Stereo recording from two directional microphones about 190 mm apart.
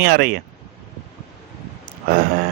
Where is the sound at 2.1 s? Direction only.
50° right (ahead or behind).